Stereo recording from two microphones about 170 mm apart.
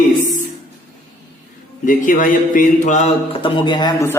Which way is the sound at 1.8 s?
50° left (ahead or behind).